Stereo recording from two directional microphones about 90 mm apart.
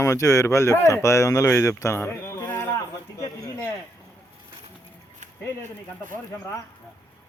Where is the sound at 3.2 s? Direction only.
40° left (ahead or behind).